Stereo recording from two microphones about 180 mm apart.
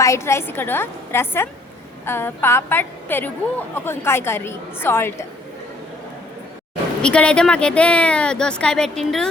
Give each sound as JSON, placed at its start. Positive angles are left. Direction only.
{"t": 0.0, "sound": "a woman's voice", "side_deg": 15}
{"t": 7.0, "sound": "speech", "side_deg": 5}